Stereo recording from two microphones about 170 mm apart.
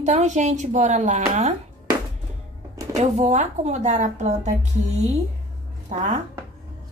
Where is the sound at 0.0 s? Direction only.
45° right (ahead or behind).